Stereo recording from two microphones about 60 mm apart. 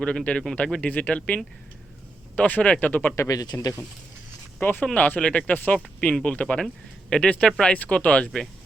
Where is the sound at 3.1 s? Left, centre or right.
Left.